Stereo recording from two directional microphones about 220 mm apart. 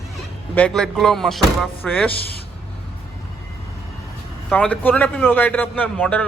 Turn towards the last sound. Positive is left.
turn(degrees=5)  # may be behind; listen again after turning